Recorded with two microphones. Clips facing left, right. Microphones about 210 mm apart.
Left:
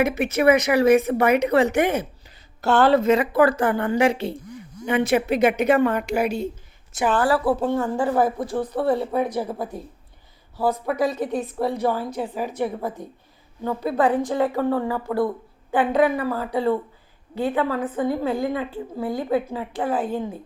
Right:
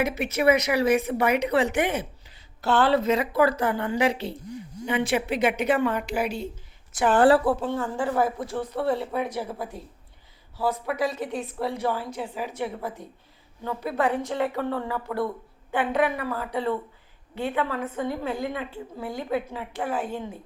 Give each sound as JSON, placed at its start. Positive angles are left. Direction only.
{"t": 0.0, "sound": "a woman's voice", "side_deg": 50}
{"t": 6.9, "sound": "a woman's voice", "side_deg": 25}
{"t": 7.6, "sound": "a woman's voice", "side_deg": 40}
{"t": 8.8, "sound": "a woman's voice", "side_deg": 50}